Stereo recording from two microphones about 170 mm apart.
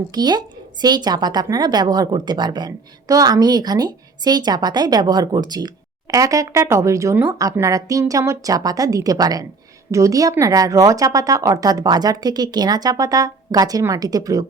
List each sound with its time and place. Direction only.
0.1 s a woman's voice: 25° right (ahead or behind)